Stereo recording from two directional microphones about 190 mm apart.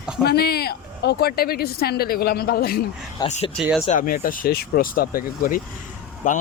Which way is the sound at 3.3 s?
35° left (ahead or behind).